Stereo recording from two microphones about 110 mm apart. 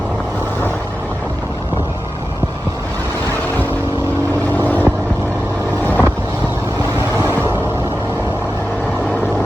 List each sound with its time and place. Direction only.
4.5 s vehicle: 15° left (ahead or behind)